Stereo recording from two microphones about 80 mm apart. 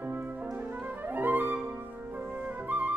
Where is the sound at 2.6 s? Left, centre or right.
Right.